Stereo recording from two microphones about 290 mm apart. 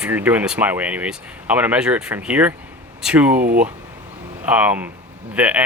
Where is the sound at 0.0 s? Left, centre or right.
Centre.